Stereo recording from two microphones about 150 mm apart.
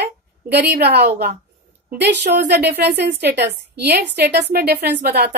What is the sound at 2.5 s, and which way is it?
A woman's voice, 90° right.